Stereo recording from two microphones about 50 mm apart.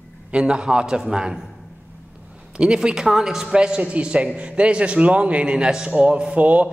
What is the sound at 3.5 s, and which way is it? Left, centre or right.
A man's voice, centre.